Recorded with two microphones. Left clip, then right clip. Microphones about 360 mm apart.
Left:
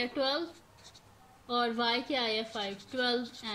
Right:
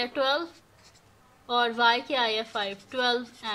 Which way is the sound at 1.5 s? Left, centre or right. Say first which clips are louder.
Right 7 dB; right.